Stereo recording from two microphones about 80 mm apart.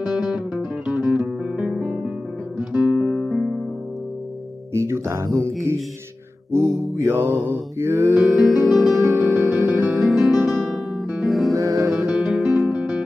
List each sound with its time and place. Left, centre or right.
0.0 s music: centre
1.6 s music: centre
2.7 s music: centre
3.3 s music: centre
4.7 s music: right
7.0 s mantra: right
8.4 s music: centre
8.9 s music: right
9.2 s music: right
9.9 s music: centre
11.5 s music: right
12.1 s music: centre